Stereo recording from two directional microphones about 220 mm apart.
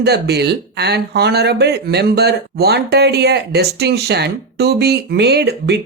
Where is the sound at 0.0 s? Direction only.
50° right (ahead or behind).